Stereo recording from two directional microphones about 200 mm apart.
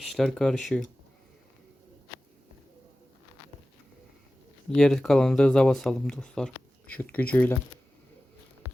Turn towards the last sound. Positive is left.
turn(degrees=10)  # may be behind; listen again after turning